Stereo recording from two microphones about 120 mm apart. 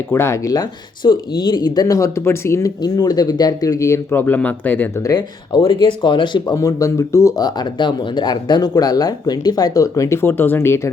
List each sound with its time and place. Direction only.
0.1 s speech: 20° left (ahead or behind)
5.0 s speech: 35° left (ahead or behind); by 10.8 s 20° left (ahead or behind)